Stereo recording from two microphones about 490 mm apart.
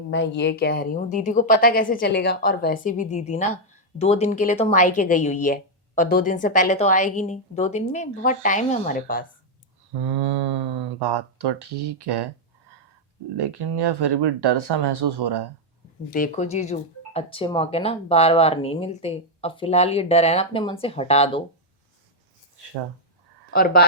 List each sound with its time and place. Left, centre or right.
0.1 s a woman's voice: left
10.0 s speech: right
13.3 s speech: right
16.1 s a woman's voice: centre
23.5 s speech: centre